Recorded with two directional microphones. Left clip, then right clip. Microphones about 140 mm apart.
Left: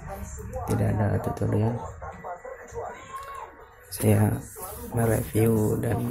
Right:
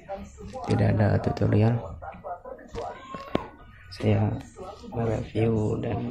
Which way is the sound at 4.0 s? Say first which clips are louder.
Left 2 dB; 30° left (ahead or behind).